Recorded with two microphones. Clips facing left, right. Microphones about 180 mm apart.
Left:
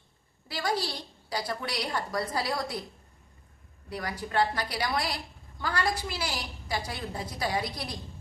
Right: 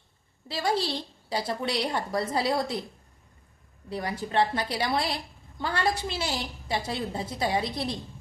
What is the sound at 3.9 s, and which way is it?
A woman's voice, 25° right (ahead or behind).